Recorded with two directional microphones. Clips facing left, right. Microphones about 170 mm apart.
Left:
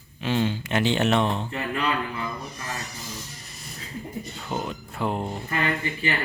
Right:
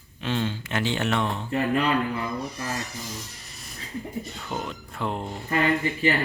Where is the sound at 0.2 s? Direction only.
10° left (ahead or behind).